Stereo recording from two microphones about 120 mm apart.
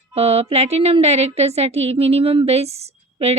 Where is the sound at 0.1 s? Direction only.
60° right (ahead or behind).